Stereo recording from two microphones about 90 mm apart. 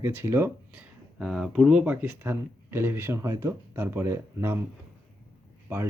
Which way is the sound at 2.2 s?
30° right (ahead or behind).